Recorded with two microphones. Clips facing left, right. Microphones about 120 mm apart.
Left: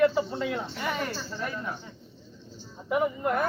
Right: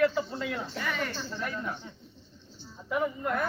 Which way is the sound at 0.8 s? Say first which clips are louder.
Left 2 dB; 25° left (ahead or behind).